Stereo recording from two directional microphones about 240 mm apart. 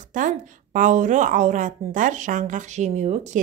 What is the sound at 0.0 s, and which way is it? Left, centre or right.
A woman's voice, right.